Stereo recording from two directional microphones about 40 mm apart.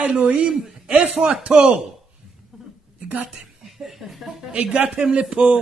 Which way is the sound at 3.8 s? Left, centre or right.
Centre.